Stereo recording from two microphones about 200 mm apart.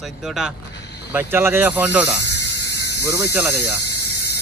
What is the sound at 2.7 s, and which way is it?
Speech, 15° right (ahead or behind).